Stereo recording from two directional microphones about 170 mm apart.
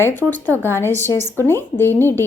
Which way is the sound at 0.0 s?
10° left (ahead or behind).